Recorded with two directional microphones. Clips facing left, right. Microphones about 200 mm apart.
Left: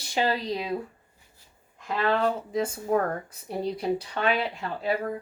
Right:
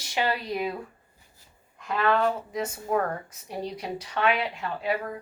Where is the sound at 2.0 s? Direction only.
30° left (ahead or behind).